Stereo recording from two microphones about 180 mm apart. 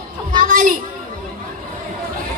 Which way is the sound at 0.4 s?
45° right (ahead or behind).